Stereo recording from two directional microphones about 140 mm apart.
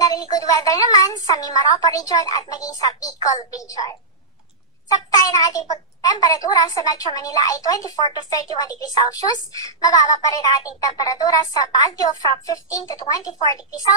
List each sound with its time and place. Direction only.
0.0 s a child's voice: 25° left (ahead or behind)